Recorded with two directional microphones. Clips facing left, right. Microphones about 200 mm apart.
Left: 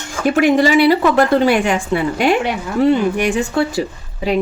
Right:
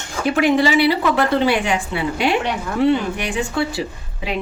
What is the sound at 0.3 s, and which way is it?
A woman's voice, 45° left (ahead or behind).